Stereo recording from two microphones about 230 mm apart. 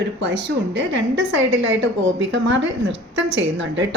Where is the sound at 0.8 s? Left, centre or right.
Right.